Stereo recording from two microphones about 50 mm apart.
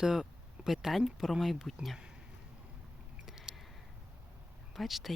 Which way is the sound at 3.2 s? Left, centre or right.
Centre.